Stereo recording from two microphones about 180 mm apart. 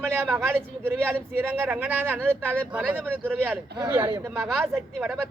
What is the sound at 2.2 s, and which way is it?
Speech, 5° left (ahead or behind).